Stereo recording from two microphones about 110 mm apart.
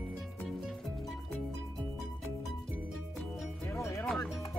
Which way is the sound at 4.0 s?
5° left (ahead or behind).